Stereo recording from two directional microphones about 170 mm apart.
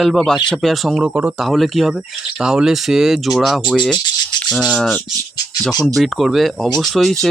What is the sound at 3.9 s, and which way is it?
Rub, 25° left (ahead or behind).